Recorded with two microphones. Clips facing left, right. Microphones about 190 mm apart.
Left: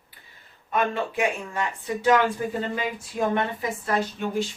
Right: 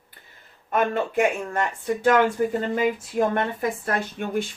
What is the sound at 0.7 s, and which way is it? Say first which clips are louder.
Speech: right 3 dB; 50° right (ahead or behind).